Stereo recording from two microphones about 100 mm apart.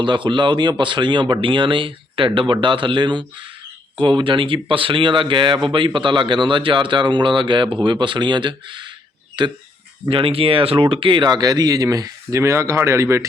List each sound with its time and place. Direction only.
0.0 s speech: 50° right (ahead or behind)
10.1 s speech: 65° right (ahead or behind); by 13.2 s 25° right (ahead or behind)